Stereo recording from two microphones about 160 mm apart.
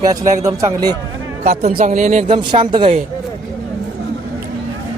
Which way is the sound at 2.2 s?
30° right (ahead or behind).